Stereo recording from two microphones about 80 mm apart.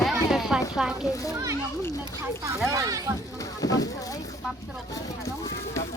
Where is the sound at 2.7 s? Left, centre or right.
Right.